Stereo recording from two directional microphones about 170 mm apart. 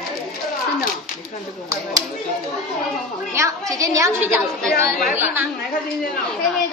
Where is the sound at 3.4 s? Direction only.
20° right (ahead or behind).